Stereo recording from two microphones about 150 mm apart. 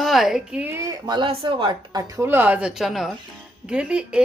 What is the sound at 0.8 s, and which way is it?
Speech, 25° right (ahead or behind).